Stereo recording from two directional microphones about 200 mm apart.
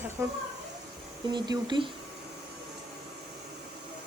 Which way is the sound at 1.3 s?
20° right (ahead or behind).